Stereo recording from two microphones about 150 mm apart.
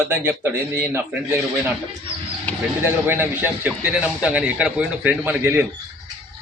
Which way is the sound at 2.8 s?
15° right (ahead or behind).